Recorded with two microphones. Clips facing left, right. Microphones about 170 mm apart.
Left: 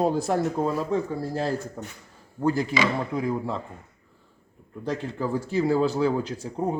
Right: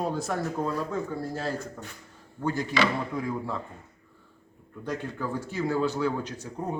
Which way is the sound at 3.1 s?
20° left (ahead or behind).